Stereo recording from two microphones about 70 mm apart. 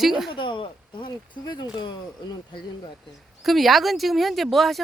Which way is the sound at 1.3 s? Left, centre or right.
Left.